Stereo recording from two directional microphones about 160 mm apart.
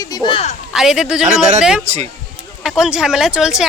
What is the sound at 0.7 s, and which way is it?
Speech, 5° right (ahead or behind).